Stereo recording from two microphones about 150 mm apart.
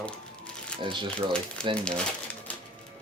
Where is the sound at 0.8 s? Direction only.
35° right (ahead or behind).